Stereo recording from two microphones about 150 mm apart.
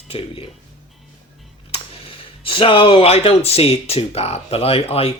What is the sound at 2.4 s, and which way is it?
Speech, 35° left (ahead or behind).